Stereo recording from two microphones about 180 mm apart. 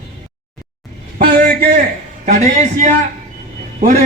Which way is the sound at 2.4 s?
40° right (ahead or behind).